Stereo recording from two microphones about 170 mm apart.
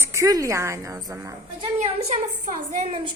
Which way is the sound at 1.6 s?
40° right (ahead or behind).